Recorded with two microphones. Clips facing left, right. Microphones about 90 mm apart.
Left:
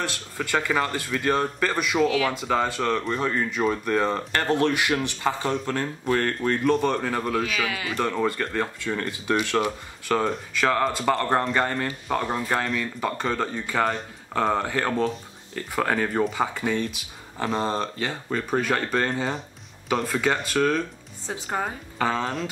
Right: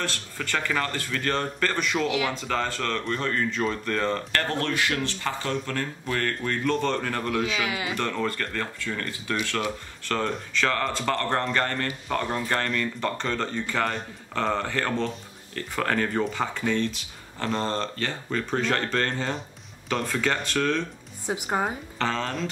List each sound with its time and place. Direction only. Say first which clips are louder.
0.0 s speech: left 2 dB; 15° left (ahead or behind)
2.0 s speech: left 3 dB; 15° right (ahead or behind)
2.3 s speech: left 4 dB; 15° left (ahead or behind)
7.4 s speech: even; 20° right (ahead or behind)
8.0 s speech: left 6 dB; 15° left (ahead or behind)
9.6 s speech: left 4 dB; 10° left (ahead or behind)
21.3 s speech: right 2 dB; 15° right (ahead or behind)
21.9 s speech: left 5 dB; 10° left (ahead or behind)